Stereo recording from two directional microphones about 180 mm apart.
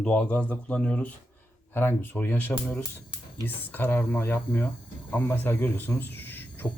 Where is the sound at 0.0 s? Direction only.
5° left (ahead or behind).